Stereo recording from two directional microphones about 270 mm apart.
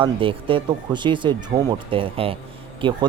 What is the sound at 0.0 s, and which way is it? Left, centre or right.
Speech, centre.